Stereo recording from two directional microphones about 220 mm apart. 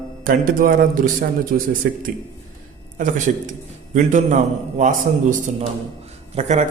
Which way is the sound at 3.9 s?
35° right (ahead or behind).